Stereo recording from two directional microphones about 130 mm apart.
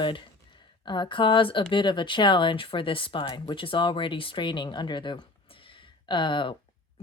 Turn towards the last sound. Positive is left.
turn(degrees=40)  # may be behind; listen again after turning